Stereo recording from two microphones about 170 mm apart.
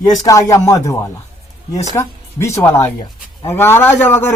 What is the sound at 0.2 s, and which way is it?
A man's voice, 20° left (ahead or behind).